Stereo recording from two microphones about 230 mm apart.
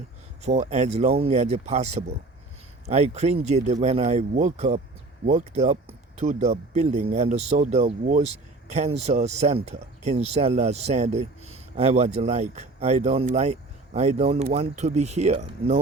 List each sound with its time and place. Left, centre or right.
0.4 s speech: right